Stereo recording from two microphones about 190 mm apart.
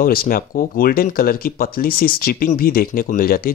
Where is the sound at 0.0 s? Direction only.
50° left (ahead or behind).